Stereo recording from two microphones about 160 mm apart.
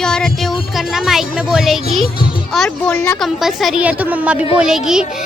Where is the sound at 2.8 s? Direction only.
15° left (ahead or behind).